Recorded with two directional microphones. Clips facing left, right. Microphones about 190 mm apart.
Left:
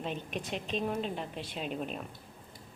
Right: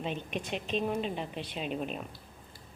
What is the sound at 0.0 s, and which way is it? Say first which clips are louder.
A woman's voice: right 1 dB; centre (ahead or behind).